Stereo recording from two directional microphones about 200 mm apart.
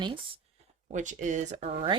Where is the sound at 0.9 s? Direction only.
40° right (ahead or behind).